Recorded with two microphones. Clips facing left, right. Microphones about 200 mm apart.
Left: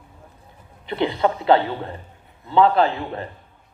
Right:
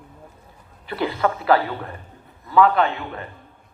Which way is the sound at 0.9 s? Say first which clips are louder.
Left 2 dB; 25° left (ahead or behind).